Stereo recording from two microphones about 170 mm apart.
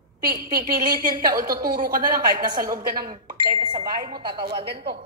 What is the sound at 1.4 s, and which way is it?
Speech, 55° right (ahead or behind).